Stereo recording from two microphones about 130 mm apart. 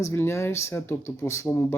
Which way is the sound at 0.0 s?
20° left (ahead or behind).